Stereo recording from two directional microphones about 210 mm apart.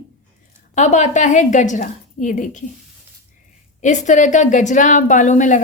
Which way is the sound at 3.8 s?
35° left (ahead or behind).